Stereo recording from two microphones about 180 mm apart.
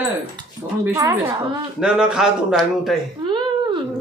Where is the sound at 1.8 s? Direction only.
5° right (ahead or behind).